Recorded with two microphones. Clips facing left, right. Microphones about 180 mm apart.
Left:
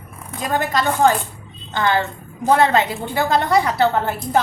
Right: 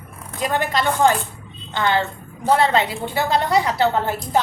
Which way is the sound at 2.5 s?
50° left (ahead or behind).